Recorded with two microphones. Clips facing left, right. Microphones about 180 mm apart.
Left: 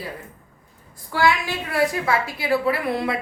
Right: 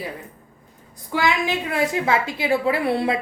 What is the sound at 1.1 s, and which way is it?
A woman's voice, 20° right (ahead or behind).